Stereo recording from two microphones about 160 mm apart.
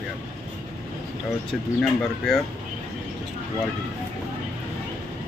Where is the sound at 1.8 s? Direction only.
Centre (ahead or behind).